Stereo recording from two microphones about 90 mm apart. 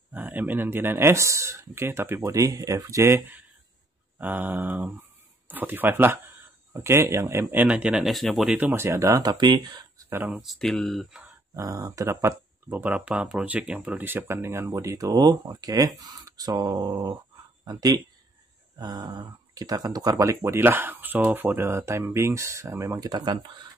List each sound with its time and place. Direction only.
0.1 s speech: 20° right (ahead or behind); by 3.2 s 35° right (ahead or behind)
4.2 s a sound: 20° right (ahead or behind)
6.7 s speech: 30° right (ahead or behind)
7.6 s speech: 10° right (ahead or behind)
8.5 s speech: 20° right (ahead or behind)
8.8 s speech: 35° right (ahead or behind); by 10.0 s 50° right (ahead or behind)
10.0 s a sound: 20° right (ahead or behind)
10.4 s speech: centre (ahead or behind)
11.5 s speech: 35° right (ahead or behind)
12.6 s speech: 20° right (ahead or behind)
21.5 s speech: 30° right (ahead or behind)
22.9 s speech: 45° right (ahead or behind)